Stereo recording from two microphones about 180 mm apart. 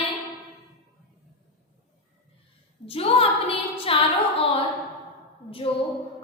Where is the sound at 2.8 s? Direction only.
30° left (ahead or behind).